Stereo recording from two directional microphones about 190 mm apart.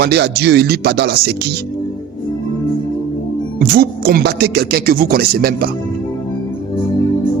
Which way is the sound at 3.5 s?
50° right (ahead or behind).